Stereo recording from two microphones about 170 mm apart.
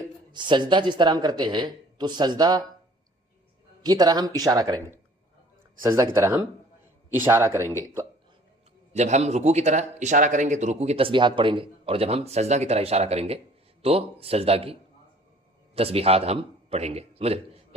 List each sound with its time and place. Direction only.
0.0 s speech: 25° right (ahead or behind)
3.8 s a man's voice: 25° right (ahead or behind)
8.9 s a man's voice: 40° right (ahead or behind)